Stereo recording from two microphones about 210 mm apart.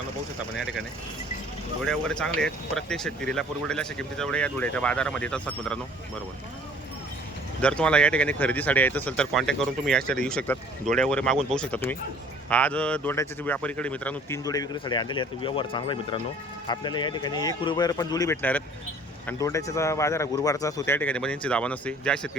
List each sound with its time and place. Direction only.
1.8 s speech: centre (ahead or behind)
7.6 s speech: 5° left (ahead or behind)